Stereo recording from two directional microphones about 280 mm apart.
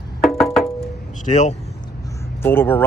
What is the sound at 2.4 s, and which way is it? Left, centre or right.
Speech, centre.